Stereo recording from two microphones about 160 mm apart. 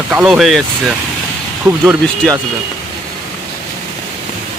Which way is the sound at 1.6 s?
15° right (ahead or behind).